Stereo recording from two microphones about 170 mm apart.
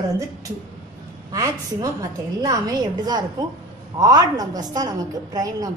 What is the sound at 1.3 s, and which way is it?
A woman's voice, 20° right (ahead or behind).